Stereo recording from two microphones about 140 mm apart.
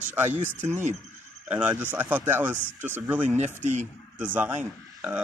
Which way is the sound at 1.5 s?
15° right (ahead or behind).